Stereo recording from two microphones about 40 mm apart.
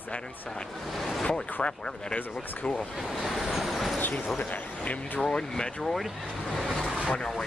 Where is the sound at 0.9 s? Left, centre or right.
Centre.